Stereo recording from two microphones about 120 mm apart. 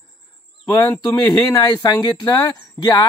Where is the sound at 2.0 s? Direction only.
35° left (ahead or behind).